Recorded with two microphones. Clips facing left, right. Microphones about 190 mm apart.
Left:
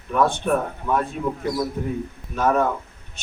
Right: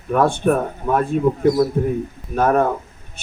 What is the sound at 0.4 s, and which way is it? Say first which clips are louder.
Speech: right 4 dB; 50° right (ahead or behind).